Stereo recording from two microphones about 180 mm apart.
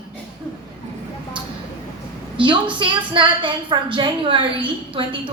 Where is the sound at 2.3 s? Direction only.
25° right (ahead or behind).